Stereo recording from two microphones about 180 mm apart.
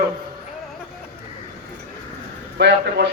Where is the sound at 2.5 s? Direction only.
65° right (ahead or behind).